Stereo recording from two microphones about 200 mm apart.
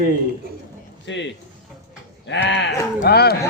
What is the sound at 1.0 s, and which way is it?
A man's voice, 65° left (ahead or behind).